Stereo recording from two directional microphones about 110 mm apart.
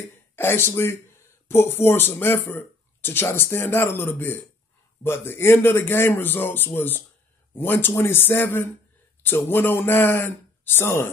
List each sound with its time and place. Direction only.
0.4 s speech: 20° left (ahead or behind)